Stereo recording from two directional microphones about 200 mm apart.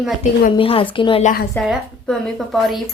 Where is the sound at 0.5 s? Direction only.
25° left (ahead or behind).